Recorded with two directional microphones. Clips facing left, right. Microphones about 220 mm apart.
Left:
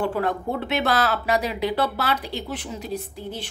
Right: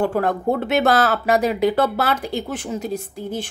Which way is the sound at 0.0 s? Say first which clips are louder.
Right 4 dB; 45° right (ahead or behind).